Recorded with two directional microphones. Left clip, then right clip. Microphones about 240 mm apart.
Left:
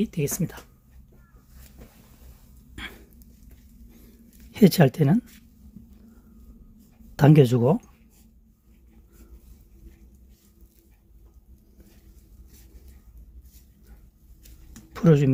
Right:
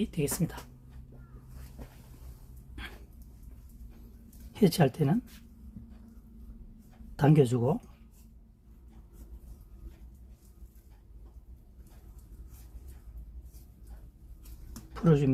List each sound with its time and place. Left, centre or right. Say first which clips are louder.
0.0 s speech: left 4 dB; left
4.5 s speech: left 7 dB; left
7.2 s speech: left 7 dB; left
14.9 s speech: left 7 dB; left